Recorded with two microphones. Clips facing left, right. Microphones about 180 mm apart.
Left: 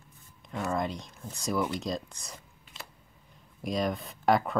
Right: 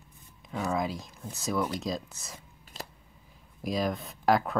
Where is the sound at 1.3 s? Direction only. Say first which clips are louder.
Even; centre (ahead or behind).